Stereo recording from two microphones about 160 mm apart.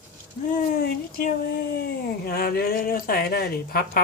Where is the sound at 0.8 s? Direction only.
70° left (ahead or behind).